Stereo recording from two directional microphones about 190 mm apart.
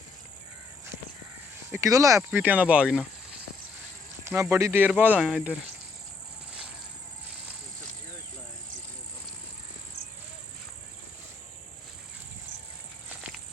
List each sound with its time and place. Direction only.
1.7 s speech: 15° right (ahead or behind)
4.3 s speech: 15° right (ahead or behind)